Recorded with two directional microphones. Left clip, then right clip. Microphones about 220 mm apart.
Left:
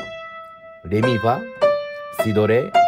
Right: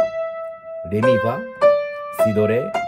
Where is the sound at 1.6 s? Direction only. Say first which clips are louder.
Right 8 dB; centre (ahead or behind).